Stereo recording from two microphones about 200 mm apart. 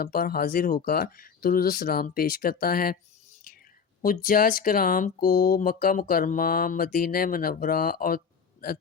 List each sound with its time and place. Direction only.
0.0 s speech: 50° left (ahead or behind)
3.5 s whispering: 45° left (ahead or behind)
4.0 s speech: 45° left (ahead or behind)